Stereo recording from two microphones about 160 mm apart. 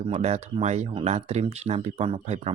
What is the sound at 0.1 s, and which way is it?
Speech, 40° right (ahead or behind).